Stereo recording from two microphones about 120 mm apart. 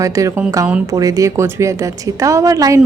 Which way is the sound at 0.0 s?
25° right (ahead or behind).